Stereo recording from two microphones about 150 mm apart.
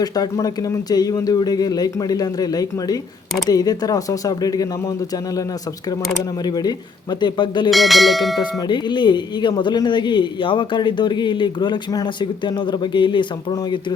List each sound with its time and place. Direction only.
0.0 s speech: 25° left (ahead or behind)
7.7 s speech: centre (ahead or behind)
8.4 s speech: 30° left (ahead or behind)